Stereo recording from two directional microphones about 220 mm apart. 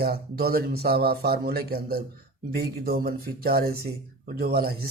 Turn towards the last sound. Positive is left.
turn(degrees=-45)  # may be behind; listen again after turning